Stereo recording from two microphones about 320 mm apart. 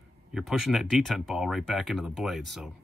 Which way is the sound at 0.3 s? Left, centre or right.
Centre.